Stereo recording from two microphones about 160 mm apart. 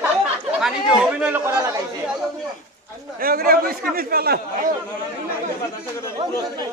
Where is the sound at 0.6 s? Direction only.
5° right (ahead or behind).